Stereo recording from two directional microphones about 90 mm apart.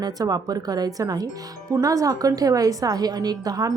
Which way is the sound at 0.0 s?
45° right (ahead or behind).